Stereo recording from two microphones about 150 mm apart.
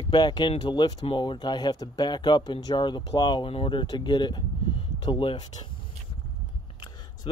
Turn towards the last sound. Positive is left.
turn(degrees=30)  # may be behind; listen again after turning